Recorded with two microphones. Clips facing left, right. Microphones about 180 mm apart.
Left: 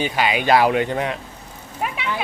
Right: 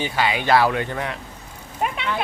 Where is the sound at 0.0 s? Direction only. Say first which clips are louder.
Left 2 dB; 15° left (ahead or behind).